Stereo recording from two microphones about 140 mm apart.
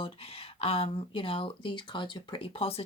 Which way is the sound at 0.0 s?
45° left (ahead or behind).